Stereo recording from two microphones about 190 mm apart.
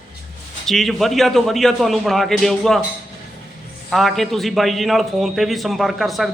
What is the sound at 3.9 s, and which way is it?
A man's voice, centre (ahead or behind).